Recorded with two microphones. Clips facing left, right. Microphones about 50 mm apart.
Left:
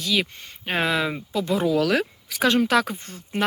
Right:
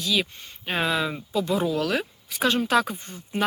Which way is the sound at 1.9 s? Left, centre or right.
Left.